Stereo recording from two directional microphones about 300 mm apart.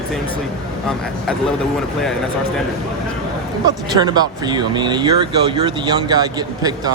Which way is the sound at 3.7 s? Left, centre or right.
Centre.